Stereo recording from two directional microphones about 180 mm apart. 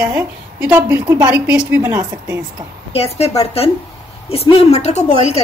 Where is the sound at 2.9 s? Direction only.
35° left (ahead or behind).